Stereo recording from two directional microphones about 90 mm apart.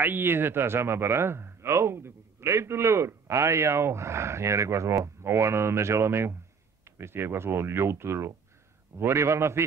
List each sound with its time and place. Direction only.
0.0 s speech: 25° right (ahead or behind)